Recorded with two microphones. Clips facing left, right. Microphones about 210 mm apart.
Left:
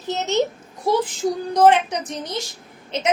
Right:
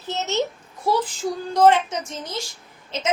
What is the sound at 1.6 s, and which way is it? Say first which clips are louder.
Speech: left 1 dB; 15° left (ahead or behind).